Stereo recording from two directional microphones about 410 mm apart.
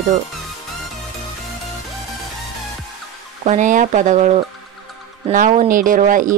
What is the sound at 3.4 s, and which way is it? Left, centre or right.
Speech, centre.